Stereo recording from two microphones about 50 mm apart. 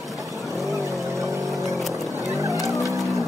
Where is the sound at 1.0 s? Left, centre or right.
Right.